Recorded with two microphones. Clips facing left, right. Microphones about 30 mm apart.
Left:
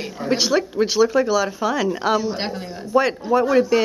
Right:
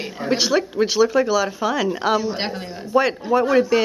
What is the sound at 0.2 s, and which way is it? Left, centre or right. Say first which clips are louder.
Speech: even; centre.